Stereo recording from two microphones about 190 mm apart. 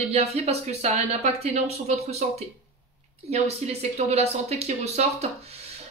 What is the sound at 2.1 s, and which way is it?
Speech, 35° right (ahead or behind).